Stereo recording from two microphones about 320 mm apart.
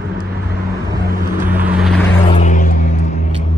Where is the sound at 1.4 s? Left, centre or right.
Centre.